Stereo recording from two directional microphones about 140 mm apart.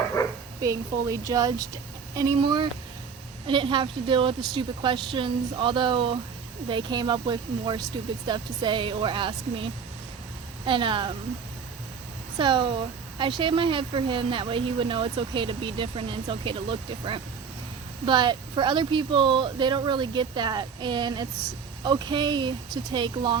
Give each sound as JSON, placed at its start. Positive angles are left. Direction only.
{"t": 0.6, "sound": "a woman's voice", "side_deg": -25}
{"t": 10.7, "sound": "speech", "side_deg": -35}
{"t": 12.4, "sound": "speech", "side_deg": -35}